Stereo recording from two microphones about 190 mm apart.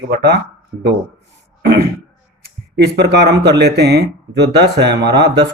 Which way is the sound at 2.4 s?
60° right (ahead or behind).